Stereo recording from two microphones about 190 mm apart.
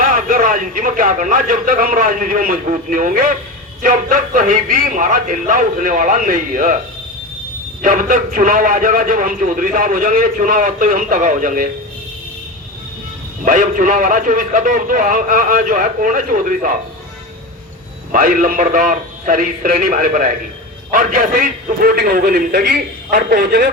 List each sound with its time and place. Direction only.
0.0 s a man's voice: 45° right (ahead or behind)
7.8 s a man's voice: 45° right (ahead or behind)
13.4 s a man's voice: 45° right (ahead or behind)
18.1 s a man's voice: 45° right (ahead or behind)